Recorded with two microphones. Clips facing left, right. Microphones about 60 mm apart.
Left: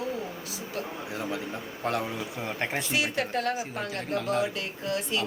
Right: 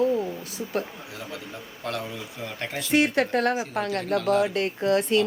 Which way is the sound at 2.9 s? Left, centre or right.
Right.